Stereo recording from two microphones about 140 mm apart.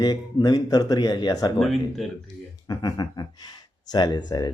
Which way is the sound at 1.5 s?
Centre (ahead or behind).